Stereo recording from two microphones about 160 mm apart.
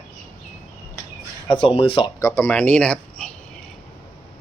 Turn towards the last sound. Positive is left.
turn(degrees=5)  # may be behind; listen again after turning